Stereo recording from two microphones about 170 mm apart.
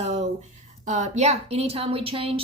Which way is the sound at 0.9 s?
45° right (ahead or behind).